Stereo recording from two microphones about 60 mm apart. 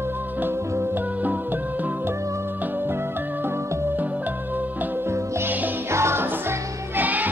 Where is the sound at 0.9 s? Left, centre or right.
Right.